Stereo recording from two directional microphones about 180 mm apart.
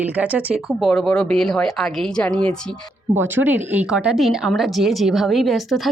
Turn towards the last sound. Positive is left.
turn(degrees=0)  # may be behind; listen again after turning